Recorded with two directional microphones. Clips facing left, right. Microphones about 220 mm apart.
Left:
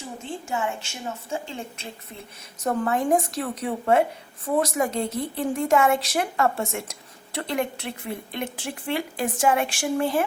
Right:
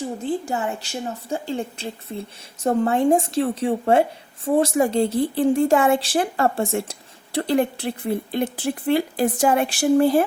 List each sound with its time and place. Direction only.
0.2 s a woman's voice: 35° right (ahead or behind)